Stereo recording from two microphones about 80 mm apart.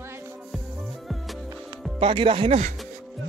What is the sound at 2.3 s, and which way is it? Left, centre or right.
Speech, right.